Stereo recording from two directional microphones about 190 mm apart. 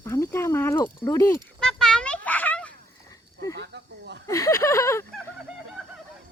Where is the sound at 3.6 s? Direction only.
65° right (ahead or behind).